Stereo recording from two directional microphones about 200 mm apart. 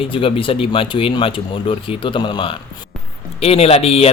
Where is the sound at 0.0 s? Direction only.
25° left (ahead or behind).